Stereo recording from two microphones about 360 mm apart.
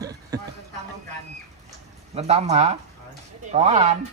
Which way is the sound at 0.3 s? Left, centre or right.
Centre.